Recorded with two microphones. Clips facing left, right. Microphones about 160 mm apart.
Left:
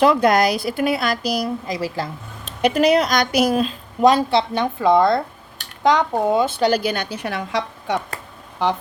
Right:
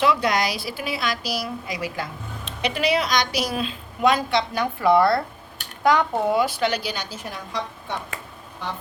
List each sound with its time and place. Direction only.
0.0 s a woman's voice: 50° left (ahead or behind); by 6.6 s 20° left (ahead or behind)
6.8 s a woman's voice: 55° left (ahead or behind); by 7.9 s 80° left